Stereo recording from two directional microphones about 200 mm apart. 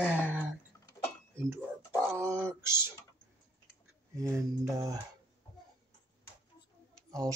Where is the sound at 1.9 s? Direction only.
10° right (ahead or behind).